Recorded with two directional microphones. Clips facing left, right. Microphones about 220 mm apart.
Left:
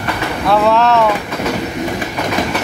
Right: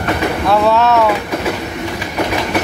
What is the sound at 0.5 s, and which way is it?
Speech, centre (ahead or behind).